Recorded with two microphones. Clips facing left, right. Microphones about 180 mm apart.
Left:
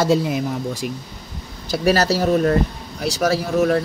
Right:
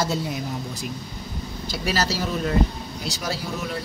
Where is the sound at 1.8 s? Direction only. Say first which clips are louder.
Left 8 dB; 60° left (ahead or behind).